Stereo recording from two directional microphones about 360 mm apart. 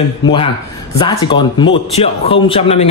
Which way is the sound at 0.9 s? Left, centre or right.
Centre.